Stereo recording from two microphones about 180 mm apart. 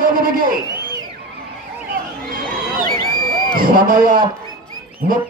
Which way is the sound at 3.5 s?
50° right (ahead or behind).